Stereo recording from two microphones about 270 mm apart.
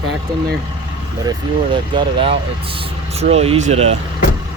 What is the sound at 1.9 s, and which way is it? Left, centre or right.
Speech, centre.